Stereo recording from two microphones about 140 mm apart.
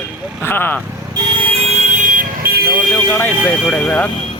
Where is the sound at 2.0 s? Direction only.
70° right (ahead or behind); by 2.7 s 90° right.